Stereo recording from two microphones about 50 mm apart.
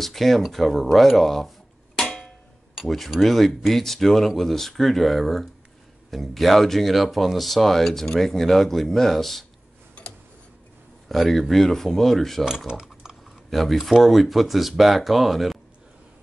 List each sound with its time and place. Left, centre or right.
0.0 s speech: centre
2.0 s a sound: centre
2.7 s speech: centre
10.0 s tick-tock: left
11.1 s speech: centre
12.4 s speech: centre
13.5 s speech: centre